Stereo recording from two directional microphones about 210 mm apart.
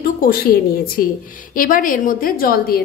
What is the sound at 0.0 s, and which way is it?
A woman's voice, 45° left (ahead or behind).